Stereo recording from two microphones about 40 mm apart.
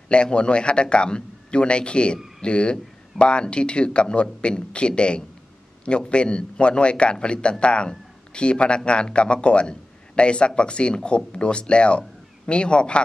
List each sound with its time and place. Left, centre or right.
0.1 s a man's voice: left